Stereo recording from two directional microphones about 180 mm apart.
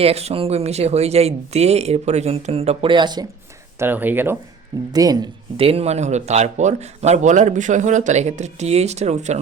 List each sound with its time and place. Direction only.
0.0 s speech: 35° right (ahead or behind)
3.8 s speech: 10° right (ahead or behind)
4.9 s speech: 20° right (ahead or behind); by 9.4 s 40° right (ahead or behind)